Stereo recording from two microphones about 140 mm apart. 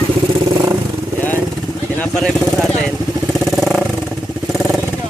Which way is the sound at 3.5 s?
Centre (ahead or behind).